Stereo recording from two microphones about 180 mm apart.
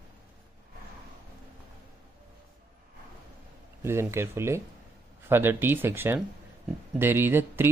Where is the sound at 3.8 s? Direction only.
15° right (ahead or behind).